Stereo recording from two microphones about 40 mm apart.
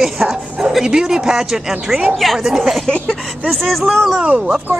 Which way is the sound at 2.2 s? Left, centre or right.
Centre.